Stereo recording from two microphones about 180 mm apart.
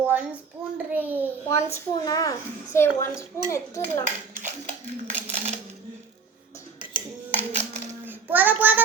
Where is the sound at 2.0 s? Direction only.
20° left (ahead or behind).